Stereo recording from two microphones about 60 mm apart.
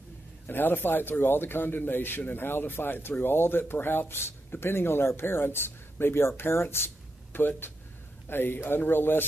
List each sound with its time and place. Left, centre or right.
0.5 s a man's voice: left